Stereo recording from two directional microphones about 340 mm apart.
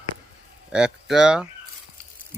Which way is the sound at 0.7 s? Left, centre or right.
Centre.